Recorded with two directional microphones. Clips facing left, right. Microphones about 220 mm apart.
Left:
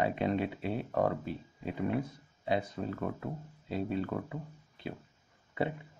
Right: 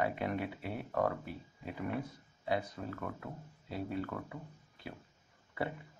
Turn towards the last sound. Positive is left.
turn(degrees=20)  # may be behind; listen again after turning